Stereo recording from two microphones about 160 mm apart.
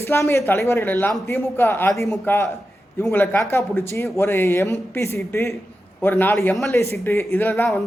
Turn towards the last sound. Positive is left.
turn(degrees=10)  # may be behind; listen again after turning